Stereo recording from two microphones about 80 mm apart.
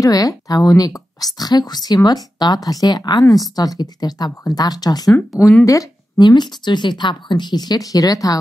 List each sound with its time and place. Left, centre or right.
0.0 s a woman's voice: left
6.1 s speech: left